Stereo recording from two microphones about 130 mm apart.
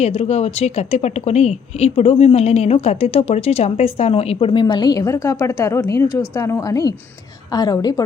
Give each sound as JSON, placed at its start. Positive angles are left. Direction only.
{"t": 0.0, "sound": "speech", "side_deg": 55}
{"t": 4.6, "sound": "a woman's voice", "side_deg": 30}